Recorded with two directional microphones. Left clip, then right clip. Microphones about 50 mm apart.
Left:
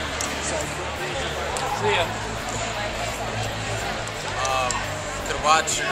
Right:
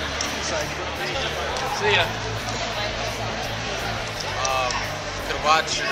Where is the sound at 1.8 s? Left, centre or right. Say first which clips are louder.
Right 3 dB; right.